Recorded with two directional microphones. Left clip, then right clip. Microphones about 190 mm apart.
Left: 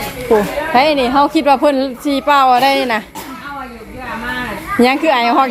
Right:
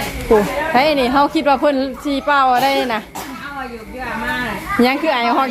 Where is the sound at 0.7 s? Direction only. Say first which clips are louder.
Left 3 dB; 10° left (ahead or behind).